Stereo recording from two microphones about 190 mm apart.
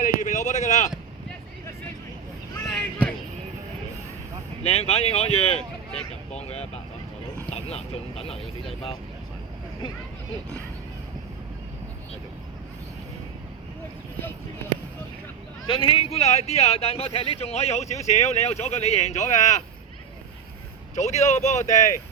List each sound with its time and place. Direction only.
0.0 s a sound: 45° left (ahead or behind)
2.7 s a sound: 5° left (ahead or behind)
4.6 s speech: 35° left (ahead or behind)
6.3 s vehicle: 35° left (ahead or behind)
7.5 s speech: 35° left (ahead or behind)
15.6 s speech: 25° left (ahead or behind)
20.9 s speech: 35° left (ahead or behind)